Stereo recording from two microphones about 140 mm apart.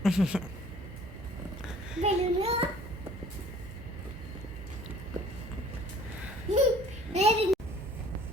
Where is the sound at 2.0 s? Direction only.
45° right (ahead or behind).